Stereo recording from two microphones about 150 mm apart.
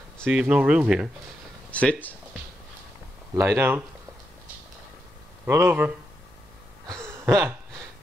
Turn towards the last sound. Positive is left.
turn(degrees=-15)  # may be behind; listen again after turning